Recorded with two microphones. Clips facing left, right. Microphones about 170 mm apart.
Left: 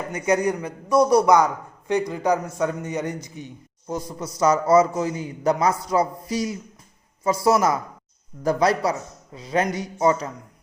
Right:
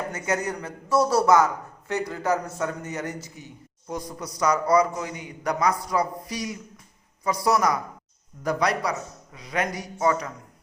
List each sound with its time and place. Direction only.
0.1 s a man's voice: 15° left (ahead or behind)